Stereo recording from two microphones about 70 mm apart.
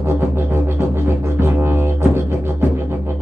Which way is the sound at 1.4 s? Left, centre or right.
Right.